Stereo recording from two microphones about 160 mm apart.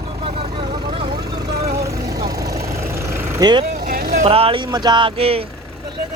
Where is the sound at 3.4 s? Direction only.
25° right (ahead or behind).